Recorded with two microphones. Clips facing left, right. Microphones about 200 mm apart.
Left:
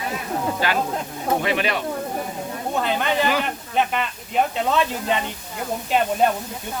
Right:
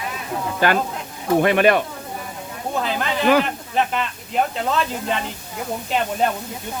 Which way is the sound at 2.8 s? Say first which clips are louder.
Right 2 dB; centre (ahead or behind).